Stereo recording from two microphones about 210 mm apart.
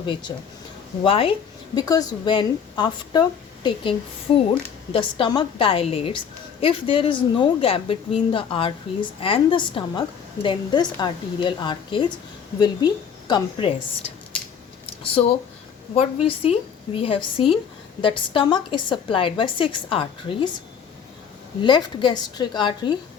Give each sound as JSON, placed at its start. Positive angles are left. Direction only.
{"t": 0.0, "sound": "a woman's voice", "side_deg": 20}
{"t": 16.0, "sound": "a woman's voice", "side_deg": 30}
{"t": 21.6, "sound": "a woman's voice", "side_deg": 20}